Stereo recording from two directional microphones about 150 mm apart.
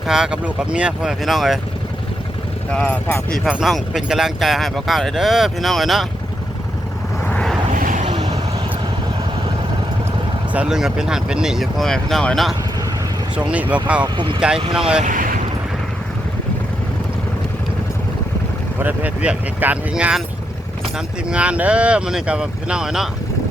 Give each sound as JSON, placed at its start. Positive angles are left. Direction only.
{"t": 0.1, "sound": "speech", "side_deg": -5}
{"t": 2.7, "sound": "speech", "side_deg": 10}
{"t": 7.3, "sound": "vehicle", "side_deg": 5}
{"t": 7.8, "sound": "vehicle", "side_deg": -60}
{"t": 8.1, "sound": "vehicle", "side_deg": -45}
{"t": 10.5, "sound": "speech", "side_deg": -5}
{"t": 13.5, "sound": "speech", "side_deg": -10}
{"t": 14.0, "sound": "speech", "side_deg": -30}
{"t": 14.7, "sound": "speech", "side_deg": -5}
{"t": 15.0, "sound": "speech", "side_deg": -60}
{"t": 18.8, "sound": "speech", "side_deg": -10}
{"t": 21.2, "sound": "speech", "side_deg": -10}